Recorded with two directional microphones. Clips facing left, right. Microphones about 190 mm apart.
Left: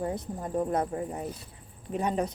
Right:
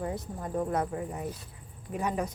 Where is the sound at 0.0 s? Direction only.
25° left (ahead or behind).